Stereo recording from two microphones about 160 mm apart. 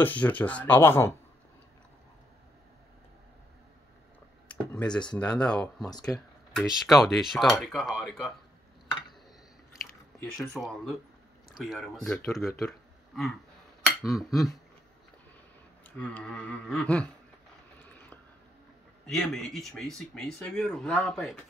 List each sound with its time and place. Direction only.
0.0 s speech: 10° left (ahead or behind)
4.5 s speech: 5° left (ahead or behind)
5.9 s speech: 25° left (ahead or behind)
6.5 s speech: centre (ahead or behind)
10.2 s speech: centre (ahead or behind)
13.8 s cutlery: centre (ahead or behind)
15.8 s speech: 10° left (ahead or behind)
19.0 s speech: 5° left (ahead or behind)